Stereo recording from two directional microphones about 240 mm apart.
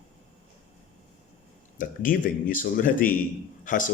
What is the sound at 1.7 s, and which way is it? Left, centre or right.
Speech, left.